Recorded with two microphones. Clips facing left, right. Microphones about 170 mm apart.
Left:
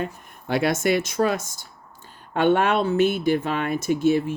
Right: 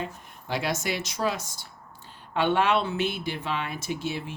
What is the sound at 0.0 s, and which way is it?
Speech, 55° left (ahead or behind).